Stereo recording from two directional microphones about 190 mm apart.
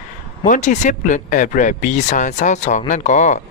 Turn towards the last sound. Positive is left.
turn(degrees=40)  # may be behind; listen again after turning